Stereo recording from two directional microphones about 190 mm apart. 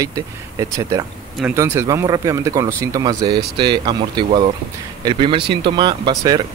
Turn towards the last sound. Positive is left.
turn(degrees=-20)  # may be behind; listen again after turning